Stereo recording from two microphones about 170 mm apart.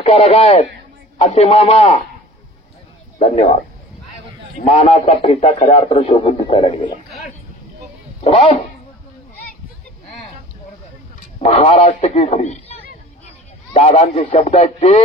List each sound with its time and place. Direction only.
0.0 s a man's voice: 35° left (ahead or behind)
3.2 s a man's voice: 40° left (ahead or behind)
4.6 s a man's voice: 35° left (ahead or behind)
8.2 s speech: 35° left (ahead or behind)
11.4 s a man's voice: 35° left (ahead or behind)